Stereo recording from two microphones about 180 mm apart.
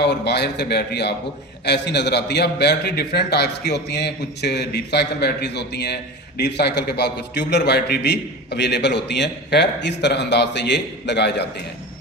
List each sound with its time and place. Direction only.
0.0 s a man's voice: 65° left (ahead or behind)